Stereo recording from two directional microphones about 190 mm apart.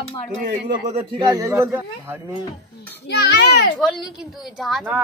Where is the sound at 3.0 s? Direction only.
65° left (ahead or behind).